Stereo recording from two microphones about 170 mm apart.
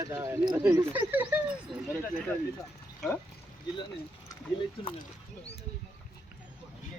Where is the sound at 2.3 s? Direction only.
15° left (ahead or behind).